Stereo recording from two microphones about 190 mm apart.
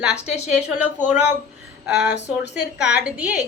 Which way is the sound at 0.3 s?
35° left (ahead or behind).